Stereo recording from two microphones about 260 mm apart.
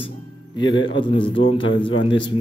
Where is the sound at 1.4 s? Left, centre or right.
Left.